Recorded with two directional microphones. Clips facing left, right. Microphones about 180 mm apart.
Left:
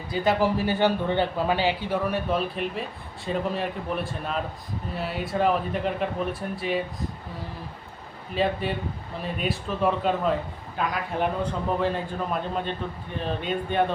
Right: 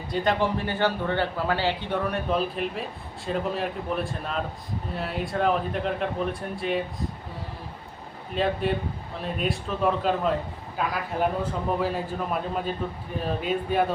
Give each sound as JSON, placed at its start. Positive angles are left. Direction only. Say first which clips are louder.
{"t": 0.1, "sound": "a man's voice", "louder": "left 2 dB", "side_deg": 5}
{"t": 1.9, "sound": "a man's voice", "louder": "left 1 dB", "side_deg": 0}
{"t": 8.4, "sound": "a man's voice", "louder": "right 1 dB", "side_deg": 0}